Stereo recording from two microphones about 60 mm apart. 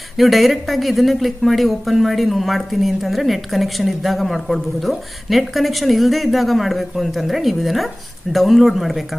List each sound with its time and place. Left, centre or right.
0.2 s speech: centre